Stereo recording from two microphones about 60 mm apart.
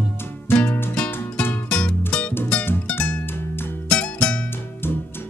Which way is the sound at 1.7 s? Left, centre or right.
Left.